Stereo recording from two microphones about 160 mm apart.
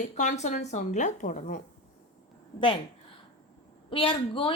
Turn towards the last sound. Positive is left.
turn(degrees=35)  # may be behind; listen again after turning